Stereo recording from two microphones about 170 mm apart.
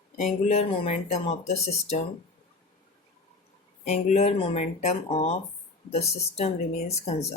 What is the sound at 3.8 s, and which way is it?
Speech, 45° left (ahead or behind).